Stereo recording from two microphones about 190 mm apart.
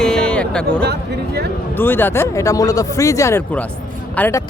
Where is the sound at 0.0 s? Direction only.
5° left (ahead or behind).